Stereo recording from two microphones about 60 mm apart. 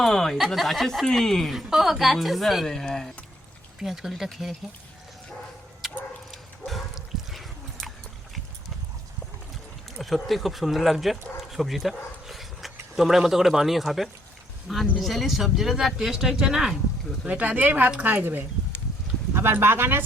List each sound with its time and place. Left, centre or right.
0.0 s speech: centre
3.8 s speech: centre
6.3 s dog: centre
10.0 s speech: centre
17.2 s speech: right